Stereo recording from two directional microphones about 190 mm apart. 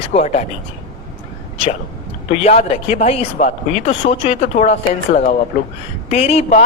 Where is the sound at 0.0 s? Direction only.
35° left (ahead or behind).